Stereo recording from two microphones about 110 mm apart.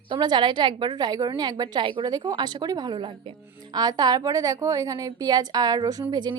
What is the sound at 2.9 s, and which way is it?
A woman's voice, 50° right (ahead or behind).